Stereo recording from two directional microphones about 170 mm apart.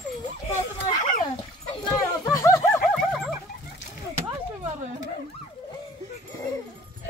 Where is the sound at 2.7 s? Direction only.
Centre (ahead or behind).